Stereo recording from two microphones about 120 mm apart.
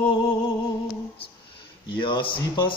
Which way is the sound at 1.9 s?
45° left (ahead or behind).